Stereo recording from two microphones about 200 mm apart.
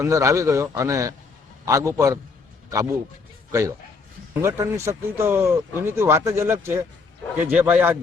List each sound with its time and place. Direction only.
0.0 s speech: 15° right (ahead or behind)
3.5 s speech: 15° right (ahead or behind)